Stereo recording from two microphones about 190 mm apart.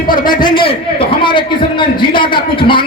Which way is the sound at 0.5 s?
30° left (ahead or behind).